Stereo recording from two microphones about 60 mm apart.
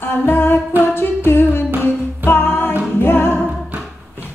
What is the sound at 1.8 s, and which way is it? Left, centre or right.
Music, left.